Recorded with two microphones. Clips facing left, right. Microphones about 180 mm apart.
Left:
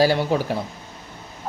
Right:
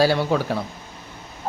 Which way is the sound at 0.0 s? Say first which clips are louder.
Even; 15° left (ahead or behind).